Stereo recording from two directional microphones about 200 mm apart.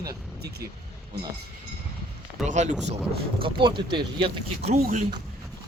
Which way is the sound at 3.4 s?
25° right (ahead or behind).